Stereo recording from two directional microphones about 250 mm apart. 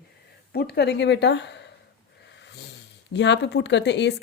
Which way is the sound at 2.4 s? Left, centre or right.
Left.